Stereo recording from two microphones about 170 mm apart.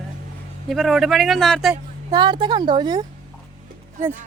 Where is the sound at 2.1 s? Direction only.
25° right (ahead or behind).